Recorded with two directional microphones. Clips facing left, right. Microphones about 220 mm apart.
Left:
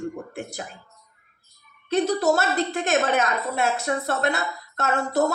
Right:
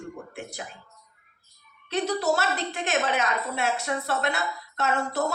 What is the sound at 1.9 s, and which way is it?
A woman's voice, 45° left (ahead or behind).